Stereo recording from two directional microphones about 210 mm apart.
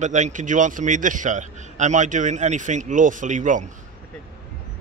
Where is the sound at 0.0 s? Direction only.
35° right (ahead or behind).